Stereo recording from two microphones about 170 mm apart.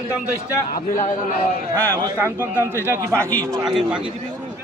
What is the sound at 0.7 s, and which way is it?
Speech, 50° left (ahead or behind).